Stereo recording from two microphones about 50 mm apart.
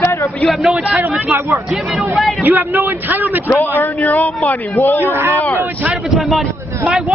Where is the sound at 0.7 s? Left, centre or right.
Right.